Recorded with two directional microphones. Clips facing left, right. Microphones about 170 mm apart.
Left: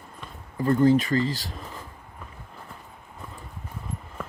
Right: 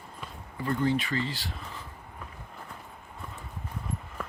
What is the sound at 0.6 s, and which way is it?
Speech, 40° left (ahead or behind).